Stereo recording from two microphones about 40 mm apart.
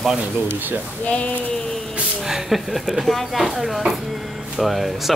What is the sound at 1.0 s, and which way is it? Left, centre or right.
Speech, left.